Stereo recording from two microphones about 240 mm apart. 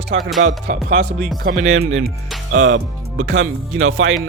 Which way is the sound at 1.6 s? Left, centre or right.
Right.